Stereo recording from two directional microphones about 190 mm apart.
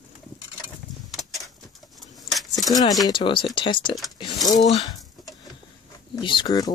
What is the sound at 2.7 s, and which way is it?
Speech, 20° left (ahead or behind).